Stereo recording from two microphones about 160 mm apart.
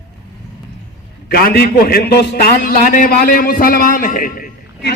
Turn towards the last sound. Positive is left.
turn(degrees=75)  # may be behind; listen again after turning